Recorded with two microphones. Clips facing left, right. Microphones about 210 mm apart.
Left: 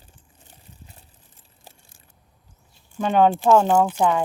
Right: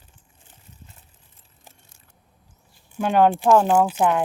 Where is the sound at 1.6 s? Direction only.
30° left (ahead or behind).